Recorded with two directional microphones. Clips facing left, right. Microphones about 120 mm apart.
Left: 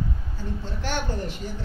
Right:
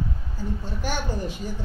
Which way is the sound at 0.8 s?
15° right (ahead or behind).